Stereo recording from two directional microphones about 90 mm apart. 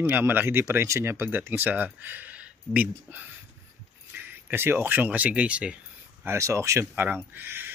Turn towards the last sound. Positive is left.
turn(degrees=-25)  # may be behind; listen again after turning